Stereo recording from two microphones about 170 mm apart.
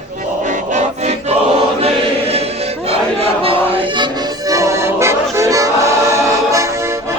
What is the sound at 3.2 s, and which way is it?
Music, 35° right (ahead or behind).